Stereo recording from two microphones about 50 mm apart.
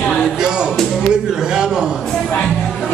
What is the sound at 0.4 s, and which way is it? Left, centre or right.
Music, centre.